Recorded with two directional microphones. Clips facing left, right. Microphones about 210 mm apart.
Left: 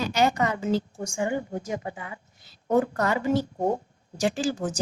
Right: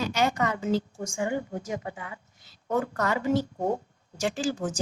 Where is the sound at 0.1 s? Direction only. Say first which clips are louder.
Left 3 dB; 35° left (ahead or behind).